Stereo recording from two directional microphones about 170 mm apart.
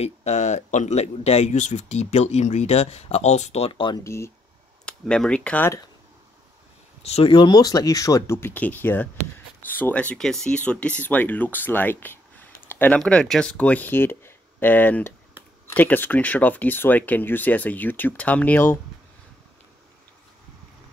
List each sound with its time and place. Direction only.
0.0 s speech: 40° left (ahead or behind)
4.0 s speech: 15° left (ahead or behind)
4.8 s speech: 5° left (ahead or behind)
7.0 s speech: 35° left (ahead or behind); by 18.8 s 10° left (ahead or behind)